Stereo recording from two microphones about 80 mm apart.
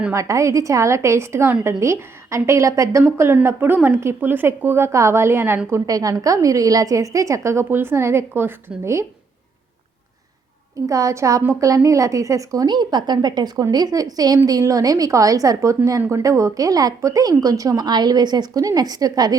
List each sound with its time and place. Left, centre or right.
0.1 s a woman's voice: right
3.4 s a woman's voice: right
5.8 s a woman's voice: right
10.8 s a woman's voice: right
12.6 s a woman's voice: right